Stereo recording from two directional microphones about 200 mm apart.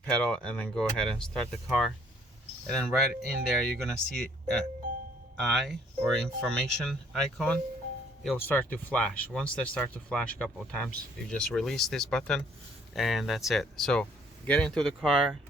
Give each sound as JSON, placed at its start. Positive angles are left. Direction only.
{"t": 0.0, "sound": "speech", "side_deg": 5}